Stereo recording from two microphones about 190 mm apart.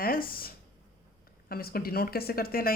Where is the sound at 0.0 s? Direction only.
50° left (ahead or behind).